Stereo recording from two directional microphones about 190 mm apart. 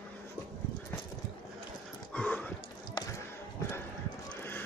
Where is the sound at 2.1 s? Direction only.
5° left (ahead or behind).